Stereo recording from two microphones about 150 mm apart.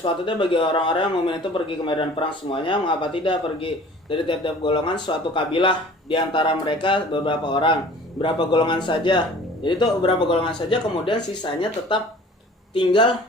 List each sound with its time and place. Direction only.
0.0 s speech: 35° left (ahead or behind)